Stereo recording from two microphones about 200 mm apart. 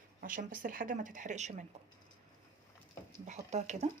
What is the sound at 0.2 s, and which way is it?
Speech, 45° right (ahead or behind).